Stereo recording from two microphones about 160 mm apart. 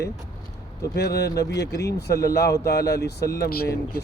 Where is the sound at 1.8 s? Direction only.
90° left.